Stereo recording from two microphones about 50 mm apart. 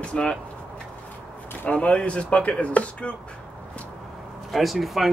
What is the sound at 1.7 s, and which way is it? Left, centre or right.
Speech, left.